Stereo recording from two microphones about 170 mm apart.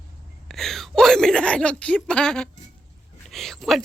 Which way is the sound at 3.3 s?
Centre (ahead or behind).